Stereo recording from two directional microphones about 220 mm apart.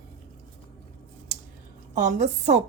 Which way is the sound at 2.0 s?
35° right (ahead or behind).